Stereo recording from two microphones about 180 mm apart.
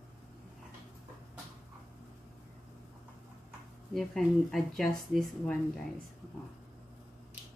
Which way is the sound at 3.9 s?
Centre (ahead or behind).